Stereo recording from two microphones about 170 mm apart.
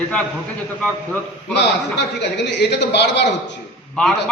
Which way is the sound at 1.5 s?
90° left.